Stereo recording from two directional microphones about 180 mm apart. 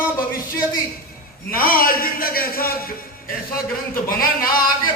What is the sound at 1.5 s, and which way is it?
A man's voice, 50° left (ahead or behind).